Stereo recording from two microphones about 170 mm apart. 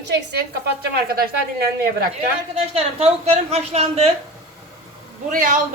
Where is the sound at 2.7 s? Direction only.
35° right (ahead or behind).